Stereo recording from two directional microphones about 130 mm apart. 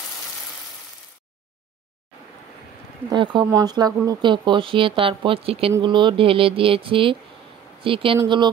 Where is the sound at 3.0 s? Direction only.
40° right (ahead or behind).